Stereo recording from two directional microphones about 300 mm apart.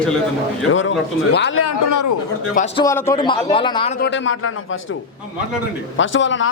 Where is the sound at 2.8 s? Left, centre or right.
Centre.